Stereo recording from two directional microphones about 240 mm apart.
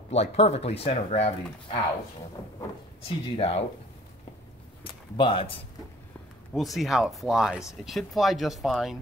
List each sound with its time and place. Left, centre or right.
0.1 s speech: left
3.1 s speech: left
5.1 s speech: centre
6.5 s speech: centre